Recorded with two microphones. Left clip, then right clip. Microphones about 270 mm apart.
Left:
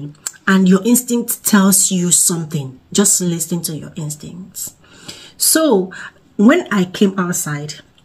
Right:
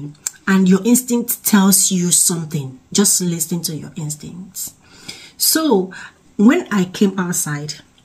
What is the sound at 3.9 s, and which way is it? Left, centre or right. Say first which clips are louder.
Speech: left 1 dB; left.